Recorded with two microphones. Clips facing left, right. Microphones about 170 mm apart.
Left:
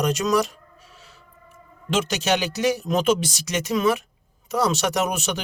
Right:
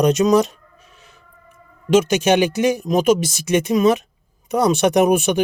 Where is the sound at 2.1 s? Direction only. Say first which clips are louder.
Right 7 dB; 15° right (ahead or behind).